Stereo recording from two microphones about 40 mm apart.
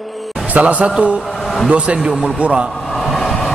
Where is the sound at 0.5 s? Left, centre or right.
Right.